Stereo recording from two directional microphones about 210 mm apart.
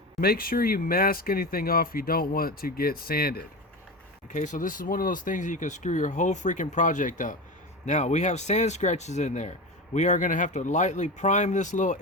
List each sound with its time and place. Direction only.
0.2 s speech: 45° left (ahead or behind)